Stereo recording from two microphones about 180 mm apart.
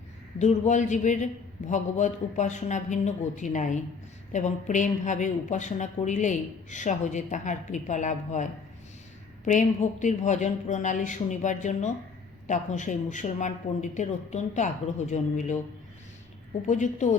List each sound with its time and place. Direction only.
0.3 s a woman's voice: 40° left (ahead or behind)
16.6 s a woman's voice: 45° left (ahead or behind)